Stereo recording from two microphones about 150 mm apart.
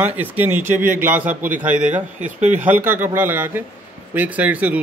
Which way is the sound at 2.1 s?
55° right (ahead or behind).